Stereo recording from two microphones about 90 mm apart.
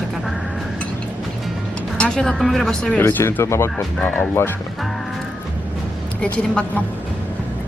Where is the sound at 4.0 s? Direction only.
20° left (ahead or behind).